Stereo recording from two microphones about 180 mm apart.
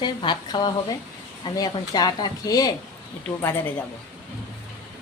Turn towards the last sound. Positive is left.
turn(degrees=10)  # may be behind; listen again after turning